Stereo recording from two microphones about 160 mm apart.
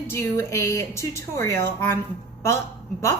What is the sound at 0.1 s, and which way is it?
A woman's voice, 15° left (ahead or behind).